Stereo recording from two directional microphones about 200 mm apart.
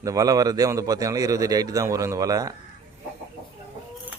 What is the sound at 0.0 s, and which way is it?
Speech, 15° right (ahead or behind).